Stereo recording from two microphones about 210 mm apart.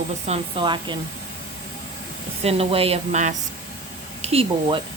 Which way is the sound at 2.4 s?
25° right (ahead or behind).